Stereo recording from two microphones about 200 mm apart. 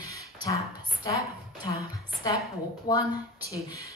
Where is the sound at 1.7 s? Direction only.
15° left (ahead or behind).